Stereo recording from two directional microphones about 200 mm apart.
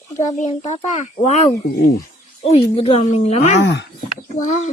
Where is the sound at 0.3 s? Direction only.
35° left (ahead or behind).